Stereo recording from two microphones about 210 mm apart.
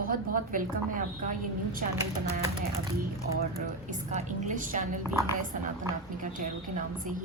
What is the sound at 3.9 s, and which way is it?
A woman's voice, 35° right (ahead or behind).